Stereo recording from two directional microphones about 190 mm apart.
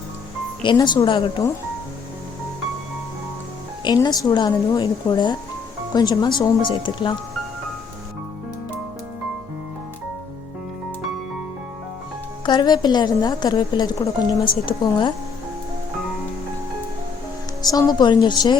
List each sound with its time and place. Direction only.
0.6 s a woman's voice: 25° left (ahead or behind)
3.8 s a woman's voice: 20° left (ahead or behind)
12.5 s a woman's voice: 25° left (ahead or behind)
17.6 s a woman's voice: 20° left (ahead or behind)